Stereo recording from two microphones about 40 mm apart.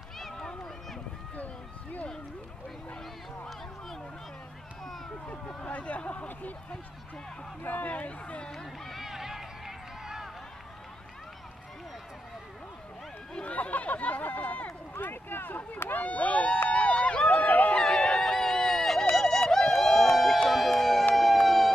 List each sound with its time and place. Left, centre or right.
0.3 s run: centre
1.3 s run: left
5.7 s speech: left
7.6 s speech: left
7.9 s speech: left
8.8 s run: centre
13.3 s chatter: left
15.0 s run: left
16.0 s run: left
17.4 s a sound: left
17.7 s music: centre
18.2 s a sound: centre
20.4 s music: centre